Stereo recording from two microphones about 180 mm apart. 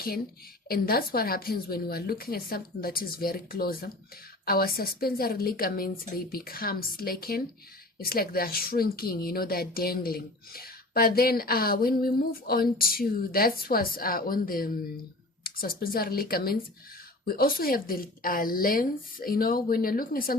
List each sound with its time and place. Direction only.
0.7 s a woman's voice: 55° left (ahead or behind)